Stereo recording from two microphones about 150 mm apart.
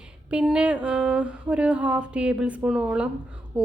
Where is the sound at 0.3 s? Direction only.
5° right (ahead or behind).